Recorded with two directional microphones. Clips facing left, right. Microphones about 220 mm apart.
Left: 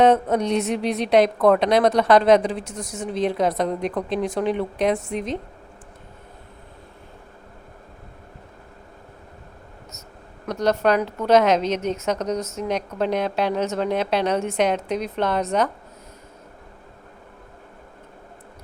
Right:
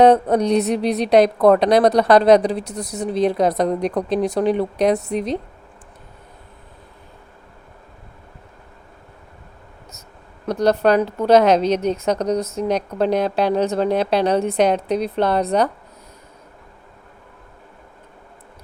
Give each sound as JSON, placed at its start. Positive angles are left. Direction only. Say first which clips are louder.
{"t": 0.0, "sound": "a woman's voice", "louder": "right 4 dB", "side_deg": -35}
{"t": 10.4, "sound": "a woman's voice", "louder": "right 4 dB", "side_deg": -35}